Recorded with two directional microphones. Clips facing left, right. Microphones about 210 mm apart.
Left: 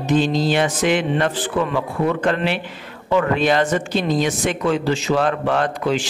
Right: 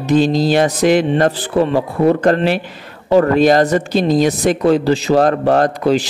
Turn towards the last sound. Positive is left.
turn(degrees=-40)  # may be behind; listen again after turning